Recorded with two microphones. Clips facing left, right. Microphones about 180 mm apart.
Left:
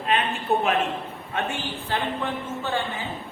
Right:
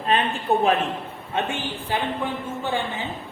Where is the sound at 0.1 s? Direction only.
35° right (ahead or behind).